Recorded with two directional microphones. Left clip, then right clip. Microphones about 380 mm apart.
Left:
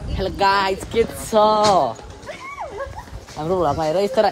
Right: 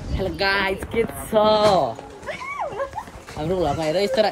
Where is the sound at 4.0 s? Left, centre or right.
Centre.